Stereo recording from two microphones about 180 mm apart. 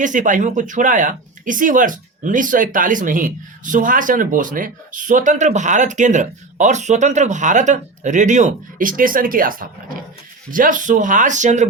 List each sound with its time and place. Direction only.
0.0 s speech: 45° right (ahead or behind)